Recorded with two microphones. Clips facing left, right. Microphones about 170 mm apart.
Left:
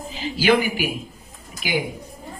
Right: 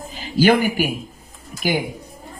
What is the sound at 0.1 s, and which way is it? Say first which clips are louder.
Speech: right 3 dB; 50° right (ahead or behind).